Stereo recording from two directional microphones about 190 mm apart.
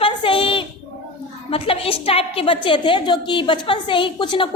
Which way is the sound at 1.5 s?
30° left (ahead or behind).